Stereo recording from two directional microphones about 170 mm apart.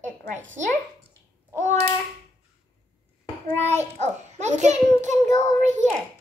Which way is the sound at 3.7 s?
40° right (ahead or behind).